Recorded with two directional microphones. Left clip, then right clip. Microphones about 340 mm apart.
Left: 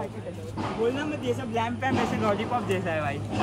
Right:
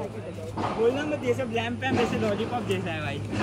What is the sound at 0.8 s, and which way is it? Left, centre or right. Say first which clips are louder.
Speech: right 3 dB; centre.